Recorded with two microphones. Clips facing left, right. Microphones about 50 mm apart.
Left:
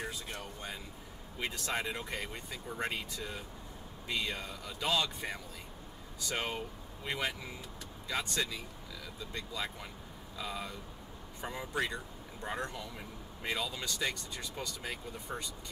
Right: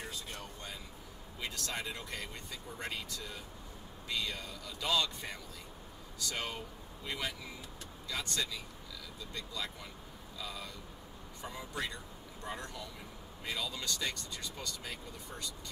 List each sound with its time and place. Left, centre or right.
0.1 s speech: centre
13.7 s speech: centre